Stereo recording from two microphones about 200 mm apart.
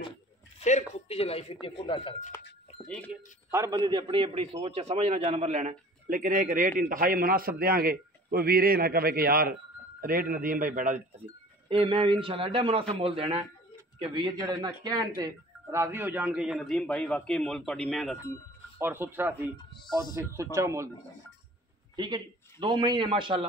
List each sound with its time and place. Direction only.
0.6 s speech: 35° left (ahead or behind)
3.4 s a man's voice: 15° right (ahead or behind); by 11.2 s 40° right (ahead or behind)
11.7 s a man's voice: 25° right (ahead or behind); by 18.2 s centre (ahead or behind)
18.8 s speech: 10° right (ahead or behind)
20.5 s speech: 15° right (ahead or behind)
21.9 s a man's voice: 20° right (ahead or behind)